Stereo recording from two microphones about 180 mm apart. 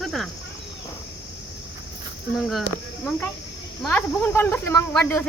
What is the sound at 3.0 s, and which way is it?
Speech, 10° left (ahead or behind).